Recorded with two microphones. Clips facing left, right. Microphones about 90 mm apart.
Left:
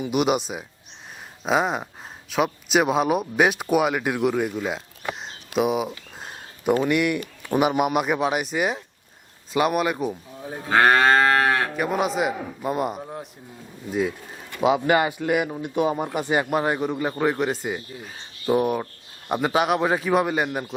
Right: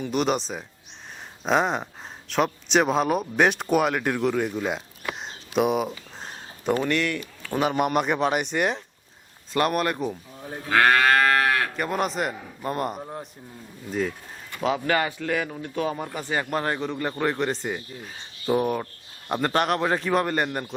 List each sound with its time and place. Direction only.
0.0 s speech: 10° left (ahead or behind)
10.7 s livestock: 25° left (ahead or behind)
11.8 s speech: 5° left (ahead or behind)
14.6 s speech: 15° left (ahead or behind)